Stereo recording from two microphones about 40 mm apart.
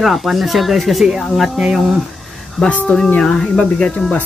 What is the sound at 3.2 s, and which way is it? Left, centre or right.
Speech, centre.